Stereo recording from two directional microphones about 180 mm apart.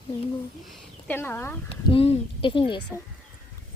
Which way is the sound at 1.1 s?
10° left (ahead or behind).